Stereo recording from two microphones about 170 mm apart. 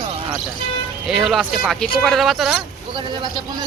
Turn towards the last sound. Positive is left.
turn(degrees=-25)  # may be behind; listen again after turning